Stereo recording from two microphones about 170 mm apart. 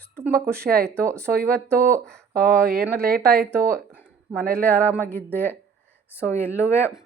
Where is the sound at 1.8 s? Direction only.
15° right (ahead or behind).